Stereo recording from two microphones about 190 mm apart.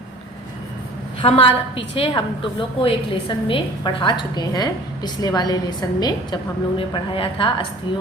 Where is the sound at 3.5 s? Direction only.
25° left (ahead or behind).